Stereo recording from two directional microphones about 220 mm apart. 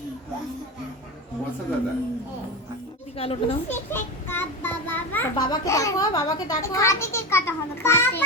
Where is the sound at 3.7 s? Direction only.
10° left (ahead or behind).